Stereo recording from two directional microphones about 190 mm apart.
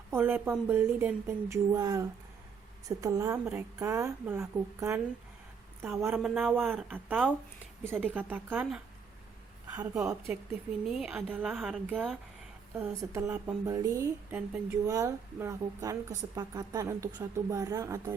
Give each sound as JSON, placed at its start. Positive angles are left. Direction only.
{"t": 0.1, "sound": "a woman's voice", "side_deg": -10}
{"t": 6.1, "sound": "a woman's voice", "side_deg": -5}
{"t": 12.7, "sound": "a woman's voice", "side_deg": -10}